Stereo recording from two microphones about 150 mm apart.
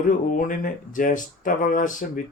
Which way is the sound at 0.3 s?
65° left (ahead or behind).